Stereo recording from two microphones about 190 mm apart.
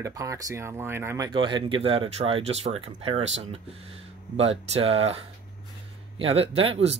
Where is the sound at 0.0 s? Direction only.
15° right (ahead or behind).